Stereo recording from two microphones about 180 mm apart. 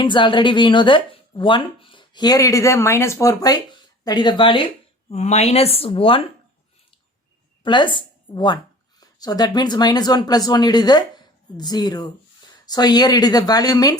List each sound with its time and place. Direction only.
0.0 s speech: 25° left (ahead or behind)
5.1 s speech: 40° left (ahead or behind)
7.6 s speech: 25° left (ahead or behind)